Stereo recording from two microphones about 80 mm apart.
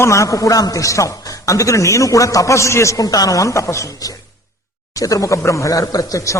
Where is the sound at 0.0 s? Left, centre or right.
Left.